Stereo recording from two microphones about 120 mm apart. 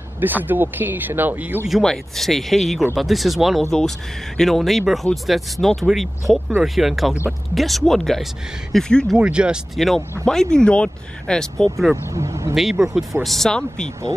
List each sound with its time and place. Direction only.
0.2 s speech: 15° right (ahead or behind)
1.7 s speech: 5° left (ahead or behind)
11.9 s speech: 25° right (ahead or behind)
12.5 s speech: 5° right (ahead or behind)